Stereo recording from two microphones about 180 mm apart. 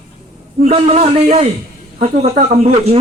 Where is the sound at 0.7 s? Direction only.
35° right (ahead or behind).